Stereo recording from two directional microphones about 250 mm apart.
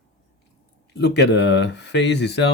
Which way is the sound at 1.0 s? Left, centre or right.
Left.